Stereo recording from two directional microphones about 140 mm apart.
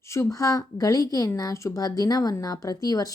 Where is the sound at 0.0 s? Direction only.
20° left (ahead or behind).